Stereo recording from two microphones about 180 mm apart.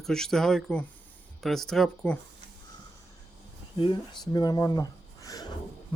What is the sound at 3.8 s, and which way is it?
Speech, 25° left (ahead or behind).